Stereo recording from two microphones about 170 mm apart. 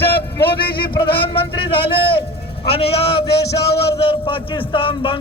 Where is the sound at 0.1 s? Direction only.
70° left (ahead or behind).